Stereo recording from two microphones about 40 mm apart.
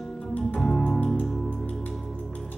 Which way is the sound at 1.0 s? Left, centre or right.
Left.